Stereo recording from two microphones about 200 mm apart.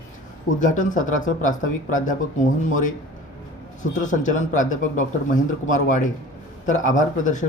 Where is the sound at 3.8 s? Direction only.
40° left (ahead or behind).